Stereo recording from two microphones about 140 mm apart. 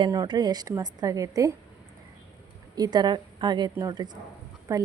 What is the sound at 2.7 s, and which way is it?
A woman's voice, 30° right (ahead or behind).